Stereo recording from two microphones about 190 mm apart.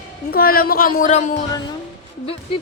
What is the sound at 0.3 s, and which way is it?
A woman's voice, 50° left (ahead or behind).